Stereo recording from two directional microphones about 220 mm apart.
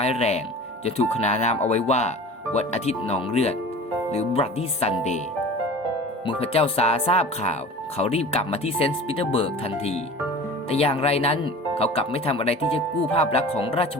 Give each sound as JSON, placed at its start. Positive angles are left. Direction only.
{"t": 0.0, "sound": "speech", "side_deg": 30}
{"t": 6.2, "sound": "speech", "side_deg": 25}